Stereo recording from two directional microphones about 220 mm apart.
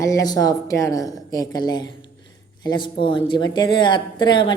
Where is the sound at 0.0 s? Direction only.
15° left (ahead or behind).